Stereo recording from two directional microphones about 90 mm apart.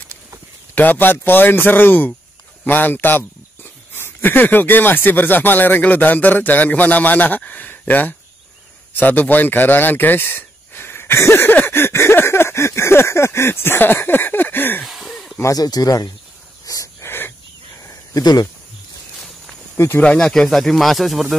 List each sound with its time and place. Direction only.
0.7 s speech: 20° left (ahead or behind)
14.9 s snake: centre (ahead or behind)
15.5 s speech: 45° left (ahead or behind)
16.6 s a sound: 35° left (ahead or behind)
20.0 s speech: 10° left (ahead or behind)